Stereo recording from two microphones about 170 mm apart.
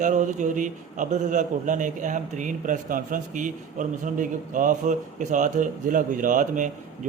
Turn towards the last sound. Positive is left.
turn(degrees=-50)  # may be behind; listen again after turning